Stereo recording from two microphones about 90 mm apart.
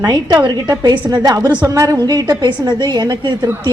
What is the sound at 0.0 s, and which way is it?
A woman's voice, 50° right (ahead or behind).